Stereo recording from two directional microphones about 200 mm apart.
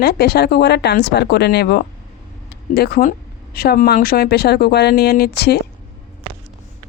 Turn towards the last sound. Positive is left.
turn(degrees=55)  # may be behind; listen again after turning